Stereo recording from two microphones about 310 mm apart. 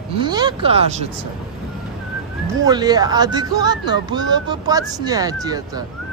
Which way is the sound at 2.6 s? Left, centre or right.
Centre.